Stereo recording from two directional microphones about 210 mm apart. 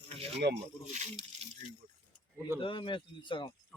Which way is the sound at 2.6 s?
25° left (ahead or behind).